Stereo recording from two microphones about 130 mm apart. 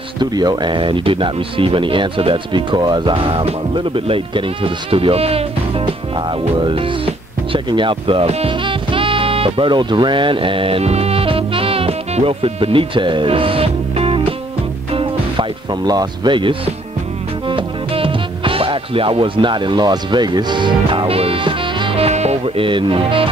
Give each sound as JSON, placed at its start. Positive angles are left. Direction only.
{"t": 0.2, "sound": "speech", "side_deg": -30}
{"t": 6.1, "sound": "music", "side_deg": -40}
{"t": 15.8, "sound": "speech", "side_deg": -30}
{"t": 17.5, "sound": "music", "side_deg": -40}
{"t": 22.7, "sound": "speech", "side_deg": -40}